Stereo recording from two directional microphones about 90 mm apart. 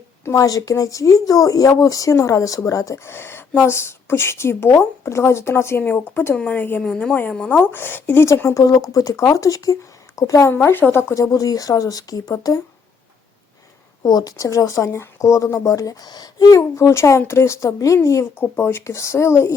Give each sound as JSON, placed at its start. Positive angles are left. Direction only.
{"t": 0.3, "sound": "a woman's voice", "side_deg": 40}
{"t": 6.3, "sound": "a woman's voice", "side_deg": 15}
{"t": 14.0, "sound": "speech", "side_deg": 45}
{"t": 18.3, "sound": "a woman's voice", "side_deg": 25}